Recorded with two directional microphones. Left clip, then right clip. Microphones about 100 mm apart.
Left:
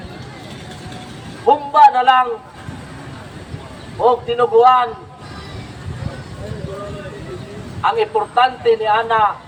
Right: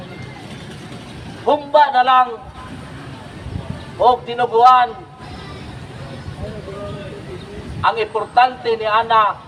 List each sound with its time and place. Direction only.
1.5 s speech: 20° right (ahead or behind)
4.0 s a man's voice: 20° right (ahead or behind)
7.8 s a man's voice: 20° right (ahead or behind)